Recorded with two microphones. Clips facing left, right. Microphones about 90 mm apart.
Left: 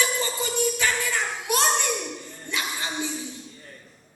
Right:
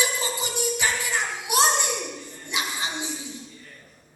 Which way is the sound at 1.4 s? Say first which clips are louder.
Right 2 dB; 15° right (ahead or behind).